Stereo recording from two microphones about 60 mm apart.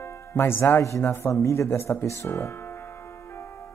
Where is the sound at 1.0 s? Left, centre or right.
Left.